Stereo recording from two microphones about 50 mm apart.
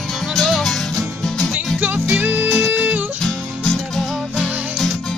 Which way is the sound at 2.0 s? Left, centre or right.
Right.